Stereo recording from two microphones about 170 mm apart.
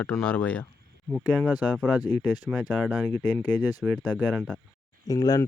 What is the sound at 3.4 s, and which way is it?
Speech, 25° left (ahead or behind).